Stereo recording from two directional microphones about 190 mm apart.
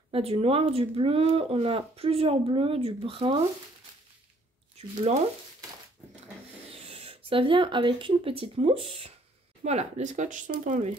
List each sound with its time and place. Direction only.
0.1 s speech: 30° right (ahead or behind)
4.7 s speech: 35° right (ahead or behind)
6.7 s speech: 30° right (ahead or behind)